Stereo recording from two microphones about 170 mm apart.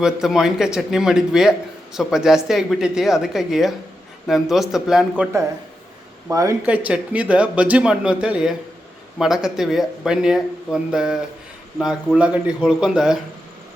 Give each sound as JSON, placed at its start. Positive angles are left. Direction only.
{"t": 0.0, "sound": "a man's voice", "side_deg": 0}
{"t": 6.2, "sound": "speech", "side_deg": -20}
{"t": 6.7, "sound": "a man's voice", "side_deg": -10}